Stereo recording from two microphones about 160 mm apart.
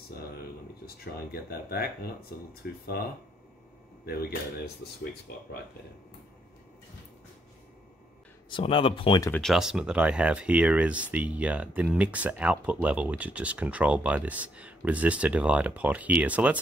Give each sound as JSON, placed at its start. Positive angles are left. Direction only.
{"t": 0.8, "sound": "speech", "side_deg": 75}
{"t": 8.5, "sound": "speech", "side_deg": 30}
{"t": 9.3, "sound": "speech", "side_deg": 0}